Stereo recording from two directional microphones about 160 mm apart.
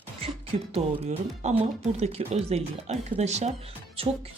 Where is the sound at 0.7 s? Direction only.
45° right (ahead or behind).